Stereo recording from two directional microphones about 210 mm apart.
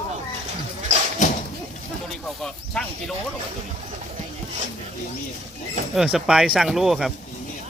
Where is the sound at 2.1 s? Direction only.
Centre (ahead or behind).